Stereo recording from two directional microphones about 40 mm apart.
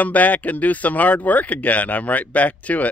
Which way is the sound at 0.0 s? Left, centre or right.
Left.